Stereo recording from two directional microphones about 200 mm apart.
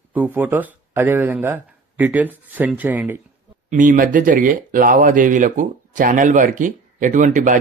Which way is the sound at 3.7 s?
40° right (ahead or behind).